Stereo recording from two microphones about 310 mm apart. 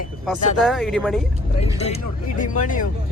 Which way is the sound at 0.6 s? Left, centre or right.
Centre.